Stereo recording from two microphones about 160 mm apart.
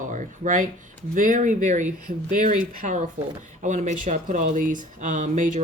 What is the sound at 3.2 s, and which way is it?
Speech, 45° right (ahead or behind).